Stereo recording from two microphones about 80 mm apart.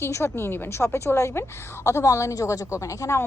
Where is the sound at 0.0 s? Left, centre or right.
Left.